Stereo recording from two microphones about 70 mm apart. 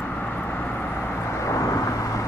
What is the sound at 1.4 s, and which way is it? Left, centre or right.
Vehicle, left.